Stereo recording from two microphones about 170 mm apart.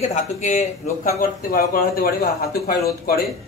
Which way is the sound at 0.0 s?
45° left (ahead or behind).